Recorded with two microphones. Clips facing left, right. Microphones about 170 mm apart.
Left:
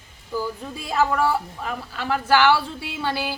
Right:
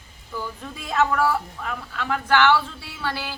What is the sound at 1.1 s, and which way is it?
Speech, 25° left (ahead or behind).